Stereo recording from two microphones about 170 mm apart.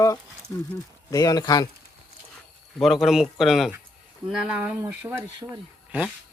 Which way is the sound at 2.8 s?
Centre (ahead or behind).